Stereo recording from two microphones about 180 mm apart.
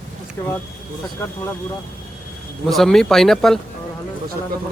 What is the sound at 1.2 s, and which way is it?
Speech, 15° left (ahead or behind).